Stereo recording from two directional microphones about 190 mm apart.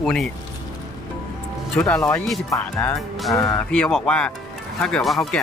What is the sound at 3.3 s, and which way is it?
Speech, 15° left (ahead or behind).